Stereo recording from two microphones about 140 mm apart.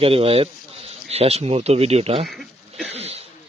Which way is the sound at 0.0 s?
40° right (ahead or behind).